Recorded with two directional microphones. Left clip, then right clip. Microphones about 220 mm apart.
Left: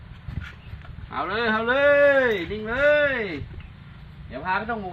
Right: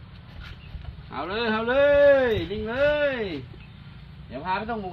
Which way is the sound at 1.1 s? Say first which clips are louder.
Left 3 dB; 15° right (ahead or behind).